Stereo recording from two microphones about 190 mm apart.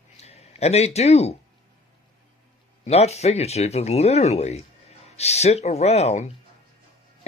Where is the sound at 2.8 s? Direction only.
35° left (ahead or behind).